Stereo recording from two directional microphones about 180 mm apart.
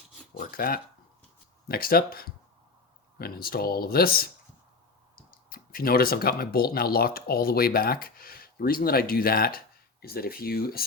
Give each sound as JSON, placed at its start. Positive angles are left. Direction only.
{"t": 0.3, "sound": "speech", "side_deg": 55}
{"t": 5.5, "sound": "speech", "side_deg": 55}